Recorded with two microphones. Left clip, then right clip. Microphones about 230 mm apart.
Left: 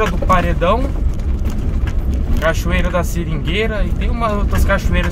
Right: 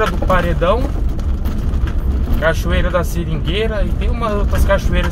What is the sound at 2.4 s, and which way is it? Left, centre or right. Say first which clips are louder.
Speech: right 1 dB; centre.